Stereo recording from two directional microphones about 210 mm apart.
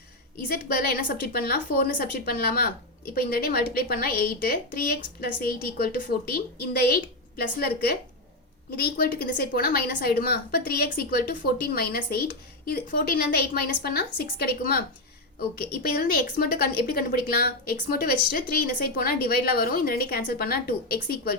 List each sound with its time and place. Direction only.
0.4 s a woman's voice: 45° left (ahead or behind)